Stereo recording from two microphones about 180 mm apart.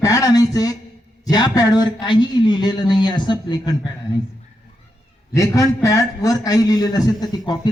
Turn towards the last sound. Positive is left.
turn(degrees=20)  # may be behind; listen again after turning